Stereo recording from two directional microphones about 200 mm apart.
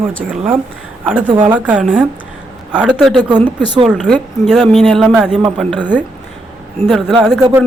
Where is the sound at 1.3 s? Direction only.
25° right (ahead or behind).